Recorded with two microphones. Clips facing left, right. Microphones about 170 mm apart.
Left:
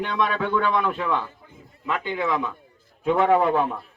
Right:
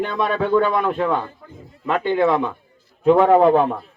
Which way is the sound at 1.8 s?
55° right (ahead or behind).